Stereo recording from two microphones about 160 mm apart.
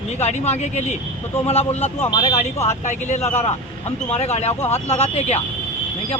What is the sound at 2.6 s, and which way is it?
Speech, 45° left (ahead or behind).